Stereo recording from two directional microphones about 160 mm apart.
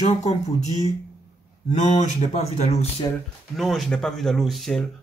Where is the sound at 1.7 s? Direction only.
50° left (ahead or behind).